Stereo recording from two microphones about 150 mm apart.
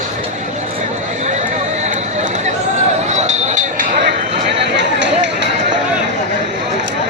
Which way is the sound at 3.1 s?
50° right (ahead or behind).